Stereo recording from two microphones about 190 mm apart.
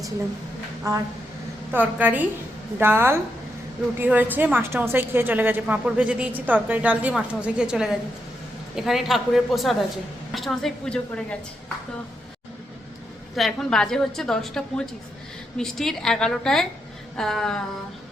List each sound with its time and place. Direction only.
0.9 s a woman's voice: 20° right (ahead or behind); by 11.3 s 5° left (ahead or behind)
13.3 s a woman's voice: centre (ahead or behind)